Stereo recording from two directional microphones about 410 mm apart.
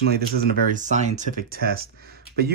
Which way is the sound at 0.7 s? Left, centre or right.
Centre.